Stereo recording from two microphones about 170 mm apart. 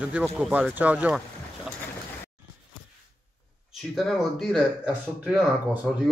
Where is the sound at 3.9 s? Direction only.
Centre (ahead or behind).